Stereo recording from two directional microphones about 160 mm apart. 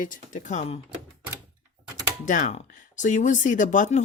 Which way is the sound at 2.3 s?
50° left (ahead or behind).